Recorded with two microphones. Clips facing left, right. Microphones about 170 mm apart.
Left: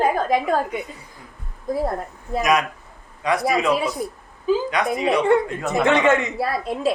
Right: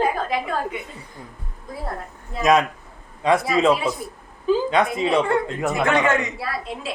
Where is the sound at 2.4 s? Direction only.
25° right (ahead or behind).